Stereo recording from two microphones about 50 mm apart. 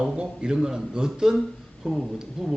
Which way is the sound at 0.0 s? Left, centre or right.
Centre.